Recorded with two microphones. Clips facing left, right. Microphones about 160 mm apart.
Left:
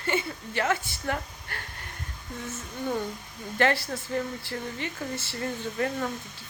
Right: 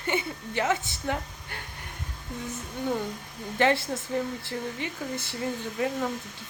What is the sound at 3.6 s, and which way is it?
Speech, 20° right (ahead or behind).